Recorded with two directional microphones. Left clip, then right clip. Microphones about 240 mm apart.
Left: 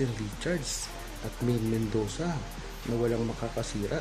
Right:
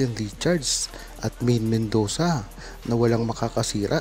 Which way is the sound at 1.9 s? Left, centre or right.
Right.